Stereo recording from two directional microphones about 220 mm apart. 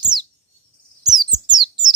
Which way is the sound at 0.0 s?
20° right (ahead or behind).